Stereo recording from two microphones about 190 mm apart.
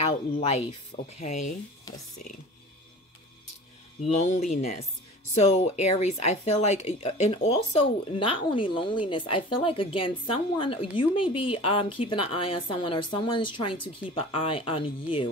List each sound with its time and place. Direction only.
0.0 s speech: 35° left (ahead or behind)
4.0 s speech: 35° left (ahead or behind)